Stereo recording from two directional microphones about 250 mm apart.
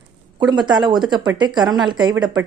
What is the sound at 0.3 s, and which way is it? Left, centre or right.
Speech, centre.